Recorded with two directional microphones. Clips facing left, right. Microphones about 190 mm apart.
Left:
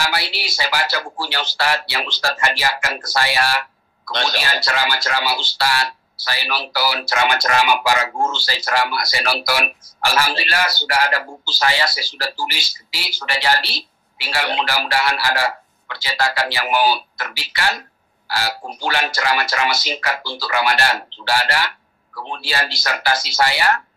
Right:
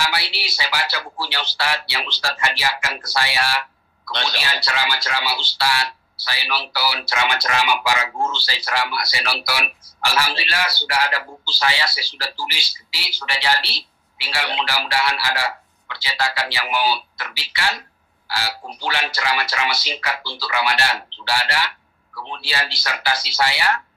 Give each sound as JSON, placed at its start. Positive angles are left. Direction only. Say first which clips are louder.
{"t": 0.0, "sound": "speech", "louder": "left 2 dB", "side_deg": 45}